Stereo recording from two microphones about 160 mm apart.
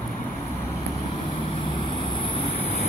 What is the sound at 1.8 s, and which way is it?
Vehicle, 30° left (ahead or behind).